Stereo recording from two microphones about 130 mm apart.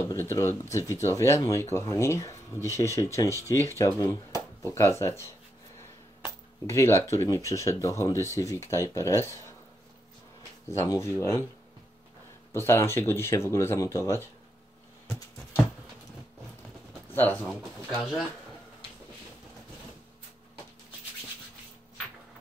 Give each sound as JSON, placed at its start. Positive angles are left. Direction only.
{"t": 0.1, "sound": "speech", "side_deg": 20}
{"t": 6.6, "sound": "speech", "side_deg": 20}
{"t": 10.7, "sound": "speech", "side_deg": 25}
{"t": 12.5, "sound": "speech", "side_deg": 20}
{"t": 17.1, "sound": "speech", "side_deg": 15}
{"t": 17.5, "sound": "speech", "side_deg": 0}